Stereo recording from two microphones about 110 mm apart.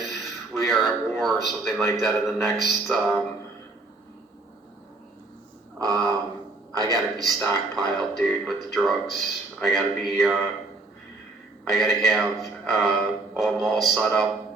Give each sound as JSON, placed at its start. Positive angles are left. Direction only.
{"t": 0.1, "sound": "speech", "side_deg": 0}
{"t": 5.8, "sound": "a sound", "side_deg": -35}
{"t": 7.2, "sound": "speech", "side_deg": 0}
{"t": 11.7, "sound": "speech", "side_deg": 0}